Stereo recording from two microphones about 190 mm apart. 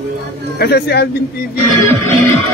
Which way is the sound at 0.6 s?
60° left (ahead or behind).